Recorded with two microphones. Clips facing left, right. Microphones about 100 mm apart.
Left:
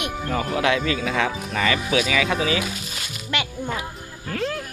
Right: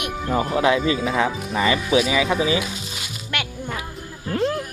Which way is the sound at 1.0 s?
5° right (ahead or behind).